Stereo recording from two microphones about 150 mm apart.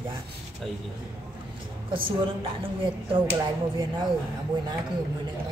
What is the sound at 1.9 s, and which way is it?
A woman's voice, 35° right (ahead or behind).